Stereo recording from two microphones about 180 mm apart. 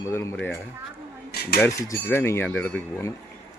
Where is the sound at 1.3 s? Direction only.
60° left (ahead or behind).